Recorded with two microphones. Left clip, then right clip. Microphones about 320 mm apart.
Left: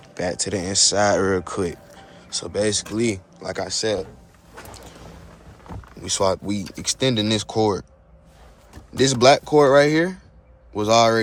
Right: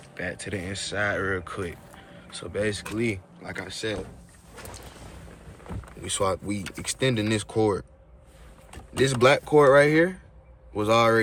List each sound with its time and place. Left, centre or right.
0.2 s speech: centre
6.0 s speech: centre
9.0 s speech: centre